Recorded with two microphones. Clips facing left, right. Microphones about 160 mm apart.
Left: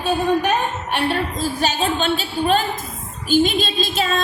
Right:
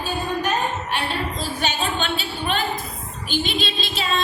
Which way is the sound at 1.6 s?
40° left (ahead or behind).